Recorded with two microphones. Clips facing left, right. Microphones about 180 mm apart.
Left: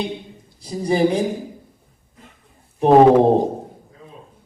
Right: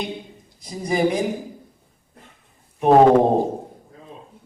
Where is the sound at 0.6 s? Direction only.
30° left (ahead or behind).